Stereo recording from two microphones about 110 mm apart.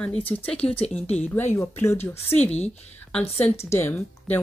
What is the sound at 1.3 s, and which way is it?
Speech, 20° left (ahead or behind).